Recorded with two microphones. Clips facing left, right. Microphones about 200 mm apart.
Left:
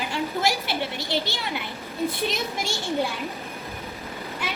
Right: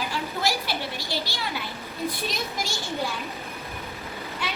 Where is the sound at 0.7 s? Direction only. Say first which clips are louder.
Left 3 dB; 25° left (ahead or behind).